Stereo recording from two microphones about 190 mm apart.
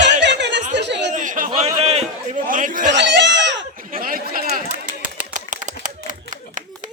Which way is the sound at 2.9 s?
65° right (ahead or behind).